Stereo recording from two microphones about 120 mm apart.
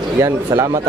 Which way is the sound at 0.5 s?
25° right (ahead or behind).